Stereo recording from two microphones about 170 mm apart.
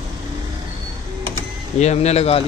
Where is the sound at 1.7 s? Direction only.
40° left (ahead or behind).